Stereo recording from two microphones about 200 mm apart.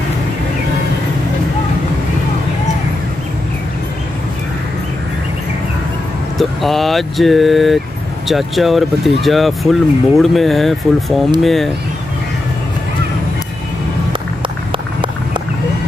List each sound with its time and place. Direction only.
6.3 s speech: centre (ahead or behind)
14.7 s run: 25° right (ahead or behind)